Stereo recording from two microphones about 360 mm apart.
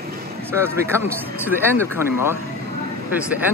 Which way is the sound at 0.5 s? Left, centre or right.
Centre.